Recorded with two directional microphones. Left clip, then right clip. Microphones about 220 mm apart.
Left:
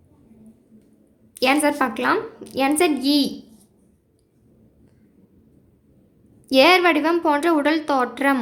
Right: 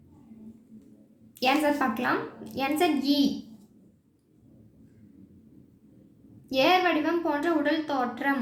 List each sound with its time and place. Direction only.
1.4 s a woman's voice: 35° left (ahead or behind)
6.5 s a woman's voice: 40° left (ahead or behind)